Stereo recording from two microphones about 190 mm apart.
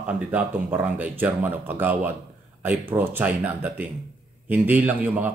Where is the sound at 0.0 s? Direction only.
5° right (ahead or behind).